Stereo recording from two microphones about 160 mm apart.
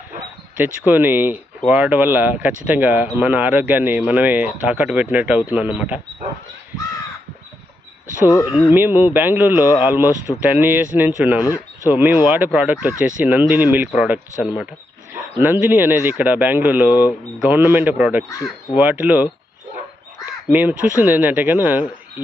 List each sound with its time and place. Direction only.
0.5 s speech: 10° right (ahead or behind)
8.3 s speech: 20° left (ahead or behind)
8.7 s speech: 10° right (ahead or behind)
11.4 s speech: 20° left (ahead or behind)
11.9 s speech: 10° right (ahead or behind)
20.5 s speech: 10° right (ahead or behind)